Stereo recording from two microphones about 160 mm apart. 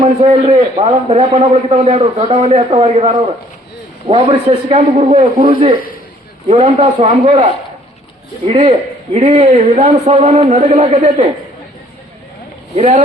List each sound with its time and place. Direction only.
0.2 s a man's voice: 45° right (ahead or behind)
5.4 s a man's voice: 35° right (ahead or behind)
9.1 s a man's voice: 45° right (ahead or behind)
12.7 s a man's voice: 45° right (ahead or behind)